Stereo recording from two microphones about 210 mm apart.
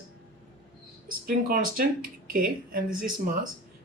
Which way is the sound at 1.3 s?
45° right (ahead or behind).